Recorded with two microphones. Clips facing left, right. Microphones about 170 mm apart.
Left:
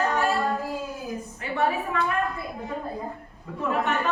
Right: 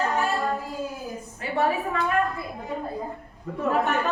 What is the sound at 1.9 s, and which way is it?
Speech, 35° right (ahead or behind).